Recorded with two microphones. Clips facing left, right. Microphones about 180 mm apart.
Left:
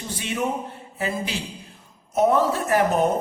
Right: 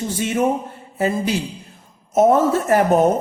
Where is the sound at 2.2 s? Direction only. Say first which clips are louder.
Right 5 dB; 45° right (ahead or behind).